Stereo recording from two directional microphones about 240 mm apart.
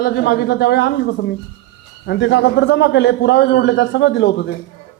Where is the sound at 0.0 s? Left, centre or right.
Left.